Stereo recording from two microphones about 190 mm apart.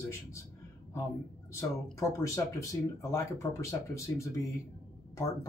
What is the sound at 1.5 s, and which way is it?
Speech, 15° left (ahead or behind).